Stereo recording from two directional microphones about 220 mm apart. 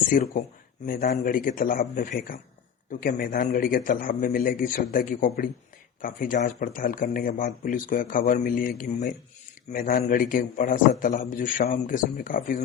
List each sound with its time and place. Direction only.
0.1 s speech: 40° left (ahead or behind)